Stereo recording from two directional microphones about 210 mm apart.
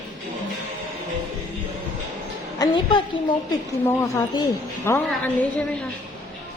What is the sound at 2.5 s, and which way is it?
A woman's voice, 20° left (ahead or behind).